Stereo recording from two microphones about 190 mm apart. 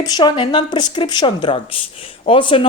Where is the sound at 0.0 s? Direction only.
25° left (ahead or behind).